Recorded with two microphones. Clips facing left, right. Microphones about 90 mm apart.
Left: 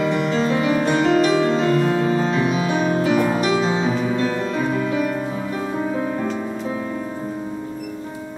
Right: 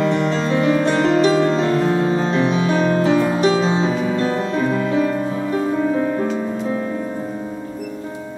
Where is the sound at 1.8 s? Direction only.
35° right (ahead or behind).